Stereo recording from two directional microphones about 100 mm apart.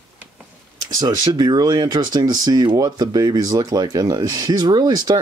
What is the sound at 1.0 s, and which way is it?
Speech, 40° right (ahead or behind).